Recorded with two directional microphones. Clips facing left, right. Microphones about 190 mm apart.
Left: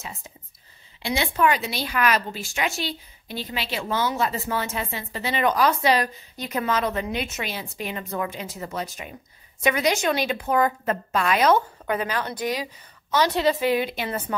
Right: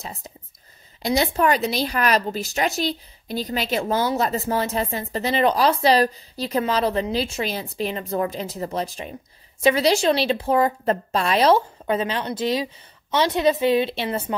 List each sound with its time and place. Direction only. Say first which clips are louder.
0.0 s a woman's voice: right 3 dB; 35° right (ahead or behind)